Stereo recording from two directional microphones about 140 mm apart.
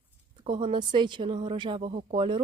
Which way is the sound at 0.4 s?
35° right (ahead or behind).